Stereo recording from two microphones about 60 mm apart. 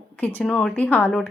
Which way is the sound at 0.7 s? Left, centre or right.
Left.